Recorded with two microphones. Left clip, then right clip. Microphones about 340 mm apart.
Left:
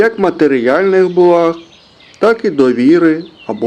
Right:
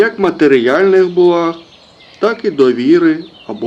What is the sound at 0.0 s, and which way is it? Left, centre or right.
Speech, centre.